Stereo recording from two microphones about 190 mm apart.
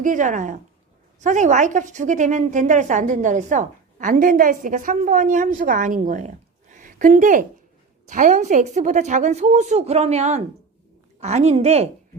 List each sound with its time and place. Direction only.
0.0 s a woman's voice: 40° right (ahead or behind)